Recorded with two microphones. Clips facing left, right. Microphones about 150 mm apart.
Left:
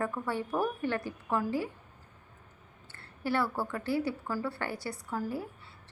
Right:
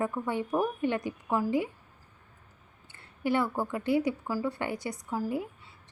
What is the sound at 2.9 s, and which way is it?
A woman's voice, 15° right (ahead or behind).